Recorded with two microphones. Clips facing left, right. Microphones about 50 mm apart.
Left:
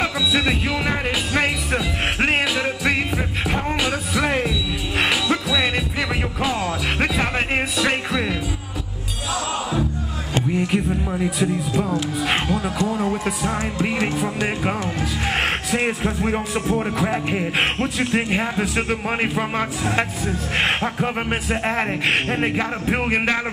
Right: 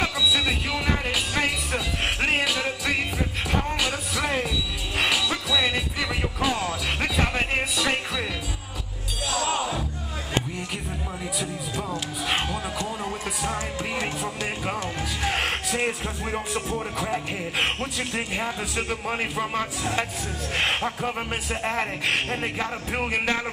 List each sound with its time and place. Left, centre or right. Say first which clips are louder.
0.3 s music: left 4 dB; left
5.5 s music: left 3 dB; centre
6.4 s music: left 2 dB; centre
7.0 s music: left 3 dB; left
7.7 s music: left 5 dB; centre
11.3 s speech: left 7 dB; centre
15.2 s music: left 3 dB; left
16.3 s a man's voice: left 6 dB; left